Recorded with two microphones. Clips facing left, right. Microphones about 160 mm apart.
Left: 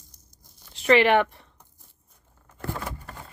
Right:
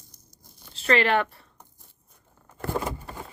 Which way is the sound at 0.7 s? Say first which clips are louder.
Left 4 dB; 15° left (ahead or behind).